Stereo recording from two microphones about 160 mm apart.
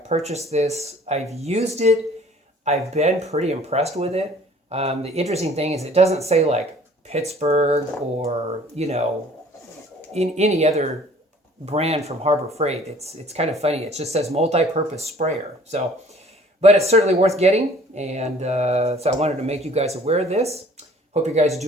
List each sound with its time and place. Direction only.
0.1 s speech: 45° right (ahead or behind)
10.1 s speech: 45° right (ahead or behind)